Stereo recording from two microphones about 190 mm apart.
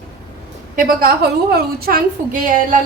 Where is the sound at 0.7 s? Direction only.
50° right (ahead or behind).